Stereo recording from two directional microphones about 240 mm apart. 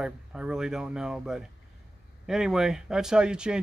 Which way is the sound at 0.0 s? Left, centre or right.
Centre.